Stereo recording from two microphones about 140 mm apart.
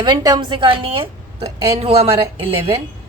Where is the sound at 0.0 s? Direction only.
30° right (ahead or behind).